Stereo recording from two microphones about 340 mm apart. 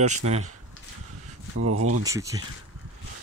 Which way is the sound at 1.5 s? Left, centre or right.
Right.